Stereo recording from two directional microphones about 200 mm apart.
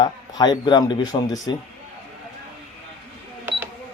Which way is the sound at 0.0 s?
20° left (ahead or behind).